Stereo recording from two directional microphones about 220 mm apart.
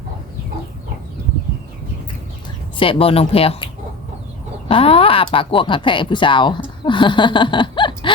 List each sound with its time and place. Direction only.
2.7 s speech: 25° left (ahead or behind)
4.7 s speech: 25° left (ahead or behind)